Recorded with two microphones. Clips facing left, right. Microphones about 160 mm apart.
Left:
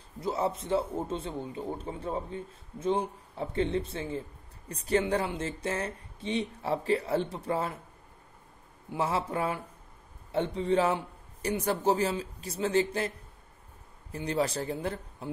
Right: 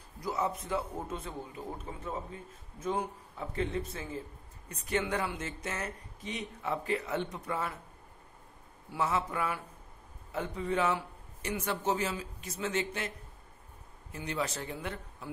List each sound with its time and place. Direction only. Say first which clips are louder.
0.2 s a man's voice: left 3 dB; 30° left (ahead or behind)
8.9 s speech: left 2 dB; 30° left (ahead or behind)
14.1 s speech: left 6 dB; 35° left (ahead or behind)